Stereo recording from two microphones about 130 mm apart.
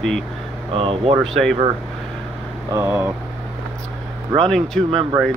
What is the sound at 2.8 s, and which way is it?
Speech, 20° right (ahead or behind).